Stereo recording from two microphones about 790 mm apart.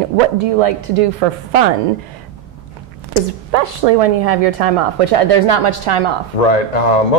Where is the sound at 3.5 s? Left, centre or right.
Right.